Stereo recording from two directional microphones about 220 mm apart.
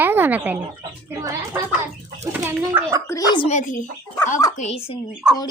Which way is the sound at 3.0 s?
15° left (ahead or behind).